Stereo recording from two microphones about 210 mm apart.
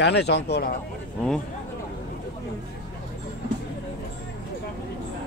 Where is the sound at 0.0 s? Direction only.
55° left (ahead or behind).